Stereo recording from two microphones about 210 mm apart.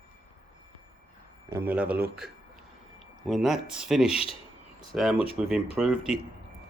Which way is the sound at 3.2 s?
Centre (ahead or behind).